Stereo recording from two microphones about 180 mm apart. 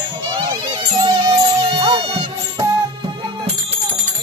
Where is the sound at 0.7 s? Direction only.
25° right (ahead or behind).